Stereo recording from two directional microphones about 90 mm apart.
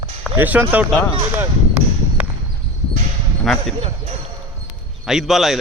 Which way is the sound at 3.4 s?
Centre (ahead or behind).